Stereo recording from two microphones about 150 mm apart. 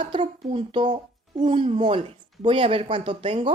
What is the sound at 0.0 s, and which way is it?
Speech, 35° right (ahead or behind).